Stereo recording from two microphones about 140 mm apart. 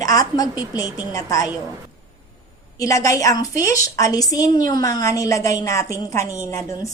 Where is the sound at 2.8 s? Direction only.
20° left (ahead or behind).